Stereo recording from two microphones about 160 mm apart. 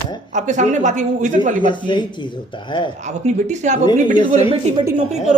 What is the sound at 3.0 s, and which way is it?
Speech, 50° right (ahead or behind).